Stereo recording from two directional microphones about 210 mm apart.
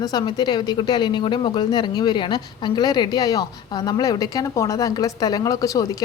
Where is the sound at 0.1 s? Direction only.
20° left (ahead or behind).